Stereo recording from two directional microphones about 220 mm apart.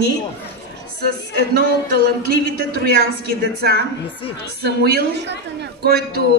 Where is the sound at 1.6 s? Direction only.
50° left (ahead or behind).